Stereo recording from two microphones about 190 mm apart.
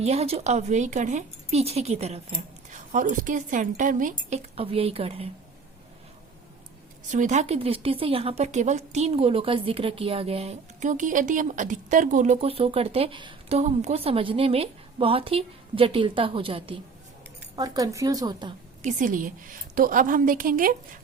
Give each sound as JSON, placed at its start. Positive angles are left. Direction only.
{"t": 0.0, "sound": "a woman's voice", "side_deg": -35}
{"t": 4.5, "sound": "a woman's voice", "side_deg": -30}
{"t": 7.1, "sound": "a woman's voice", "side_deg": -40}
{"t": 18.8, "sound": "a woman's voice", "side_deg": -40}